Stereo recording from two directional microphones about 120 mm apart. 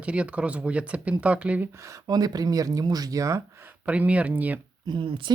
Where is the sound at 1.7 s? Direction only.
25° right (ahead or behind).